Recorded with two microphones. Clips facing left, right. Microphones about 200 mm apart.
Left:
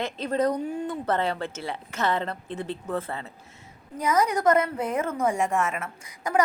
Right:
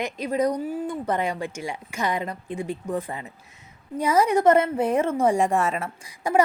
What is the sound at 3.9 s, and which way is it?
A woman's voice, 30° right (ahead or behind).